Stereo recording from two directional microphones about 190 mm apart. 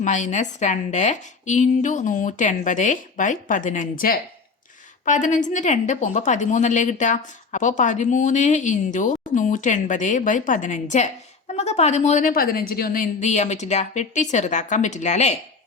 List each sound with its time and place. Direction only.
0.0 s a woman's voice: 40° left (ahead or behind)